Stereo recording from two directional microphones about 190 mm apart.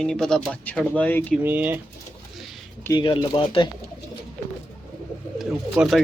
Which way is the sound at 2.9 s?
25° left (ahead or behind).